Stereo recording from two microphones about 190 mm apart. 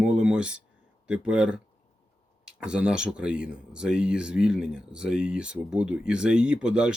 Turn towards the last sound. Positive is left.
turn(degrees=-5)  # may be behind; listen again after turning